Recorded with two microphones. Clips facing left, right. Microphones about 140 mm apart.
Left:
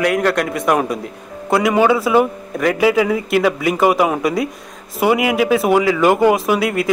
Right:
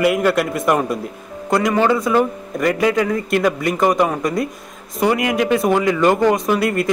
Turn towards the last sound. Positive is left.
turn(degrees=0)  # may be behind; listen again after turning